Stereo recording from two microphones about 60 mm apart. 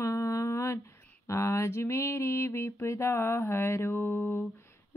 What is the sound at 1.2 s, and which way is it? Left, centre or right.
Female singing, left.